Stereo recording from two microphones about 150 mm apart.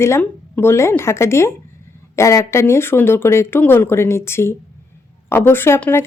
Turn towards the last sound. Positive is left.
turn(degrees=15)  # may be behind; listen again after turning